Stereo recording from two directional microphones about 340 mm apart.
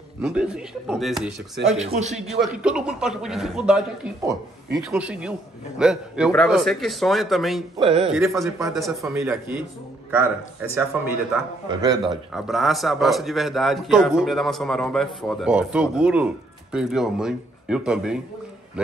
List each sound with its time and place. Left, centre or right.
0.2 s a man's voice: centre
1.6 s speech: centre
2.1 s a man's voice: centre
7.7 s speech: centre
8.1 s a man's voice: centre
11.8 s speech: centre
12.3 s a man's voice: centre